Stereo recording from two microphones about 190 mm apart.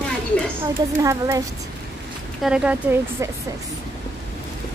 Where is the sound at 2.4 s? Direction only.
5° right (ahead or behind).